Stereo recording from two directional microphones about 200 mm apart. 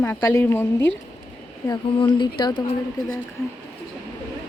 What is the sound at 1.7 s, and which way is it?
Speech, 25° left (ahead or behind).